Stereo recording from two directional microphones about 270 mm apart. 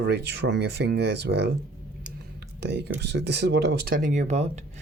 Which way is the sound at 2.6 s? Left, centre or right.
Right.